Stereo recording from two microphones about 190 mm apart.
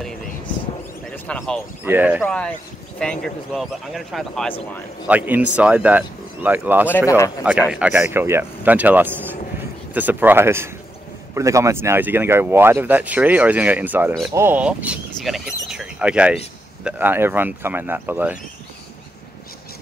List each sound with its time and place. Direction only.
1.1 s speech: 5° left (ahead or behind)
1.9 s speech: 10° right (ahead or behind)
2.2 s speech: 5° left (ahead or behind)
5.0 s speech: 10° right (ahead or behind)
7.1 s speech: 15° left (ahead or behind)
7.7 s speech: 10° right (ahead or behind)